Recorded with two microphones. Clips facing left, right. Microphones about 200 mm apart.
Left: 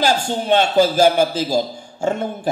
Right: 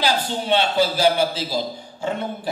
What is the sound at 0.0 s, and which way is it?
A man's voice, 45° left (ahead or behind).